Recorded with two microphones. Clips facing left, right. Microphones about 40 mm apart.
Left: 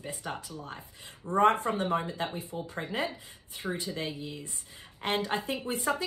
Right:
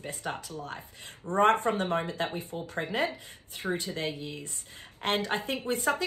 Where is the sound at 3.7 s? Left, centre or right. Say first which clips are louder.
Right 2 dB; right.